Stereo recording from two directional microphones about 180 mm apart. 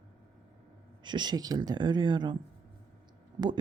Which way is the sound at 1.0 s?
25° right (ahead or behind).